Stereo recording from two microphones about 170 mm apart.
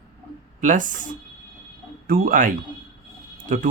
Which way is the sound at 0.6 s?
50° right (ahead or behind).